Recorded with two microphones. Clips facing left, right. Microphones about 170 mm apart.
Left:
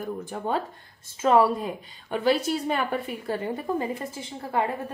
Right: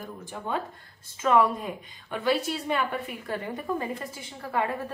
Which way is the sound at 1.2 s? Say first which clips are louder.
Left 3 dB; 35° left (ahead or behind).